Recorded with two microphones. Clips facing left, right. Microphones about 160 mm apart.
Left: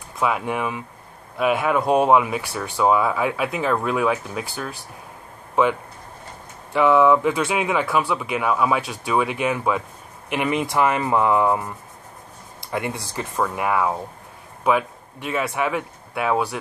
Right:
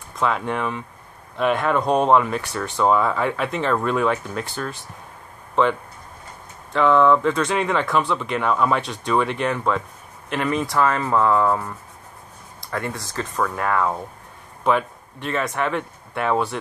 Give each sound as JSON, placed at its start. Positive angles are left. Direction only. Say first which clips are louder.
{"t": 0.2, "sound": "speech", "louder": "even", "side_deg": 10}
{"t": 6.7, "sound": "speech", "louder": "even", "side_deg": 10}
{"t": 12.7, "sound": "speech", "louder": "left 1 dB", "side_deg": 15}